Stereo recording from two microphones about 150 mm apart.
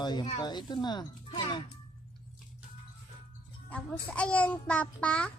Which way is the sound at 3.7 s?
10° left (ahead or behind).